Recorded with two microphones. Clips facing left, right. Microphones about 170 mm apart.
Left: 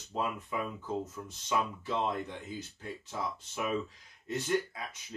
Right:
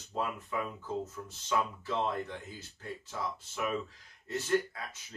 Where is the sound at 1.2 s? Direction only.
15° left (ahead or behind).